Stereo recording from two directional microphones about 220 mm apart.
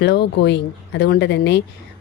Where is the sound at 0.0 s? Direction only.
50° left (ahead or behind).